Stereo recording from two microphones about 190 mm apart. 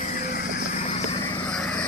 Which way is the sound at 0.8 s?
30° left (ahead or behind).